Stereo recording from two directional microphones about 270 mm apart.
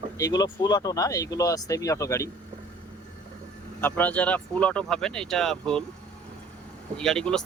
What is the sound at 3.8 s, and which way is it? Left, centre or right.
Speech, centre.